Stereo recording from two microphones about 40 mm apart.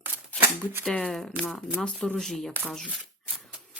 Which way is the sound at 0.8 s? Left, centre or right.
Left.